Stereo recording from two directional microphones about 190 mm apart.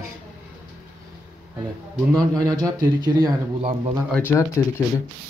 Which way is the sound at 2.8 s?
20° right (ahead or behind).